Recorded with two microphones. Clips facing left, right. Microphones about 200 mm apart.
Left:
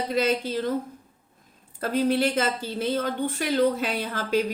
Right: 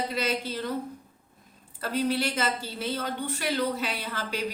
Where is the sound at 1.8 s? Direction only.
50° left (ahead or behind).